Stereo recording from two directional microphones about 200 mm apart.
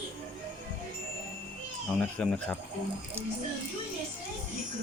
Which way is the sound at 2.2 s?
5° left (ahead or behind).